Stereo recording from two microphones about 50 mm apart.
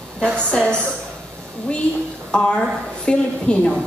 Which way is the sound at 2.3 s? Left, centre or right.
Left.